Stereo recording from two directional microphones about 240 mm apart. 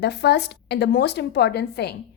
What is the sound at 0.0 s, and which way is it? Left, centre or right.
A woman's voice, left.